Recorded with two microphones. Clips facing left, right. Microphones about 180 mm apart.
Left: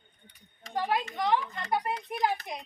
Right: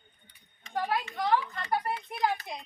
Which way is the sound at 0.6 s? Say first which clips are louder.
Left 1 dB; 40° left (ahead or behind).